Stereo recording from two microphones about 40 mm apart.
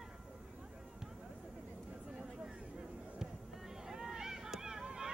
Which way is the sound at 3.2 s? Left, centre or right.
Centre.